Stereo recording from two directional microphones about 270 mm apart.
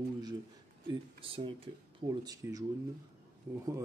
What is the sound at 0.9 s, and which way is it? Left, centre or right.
Speech, centre.